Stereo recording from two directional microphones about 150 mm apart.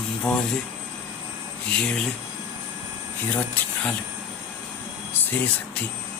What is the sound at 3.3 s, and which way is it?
Speech, 10° left (ahead or behind).